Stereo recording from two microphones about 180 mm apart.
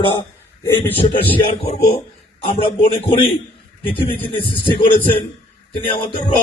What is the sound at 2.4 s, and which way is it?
A man's voice, 30° left (ahead or behind).